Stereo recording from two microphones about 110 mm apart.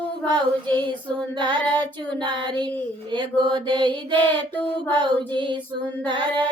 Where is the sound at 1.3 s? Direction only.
45° right (ahead or behind).